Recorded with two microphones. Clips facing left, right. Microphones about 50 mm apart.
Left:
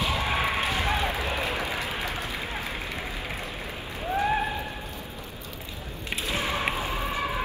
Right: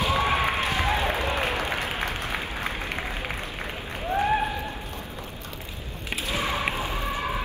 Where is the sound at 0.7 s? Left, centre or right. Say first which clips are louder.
Right 2 dB; right.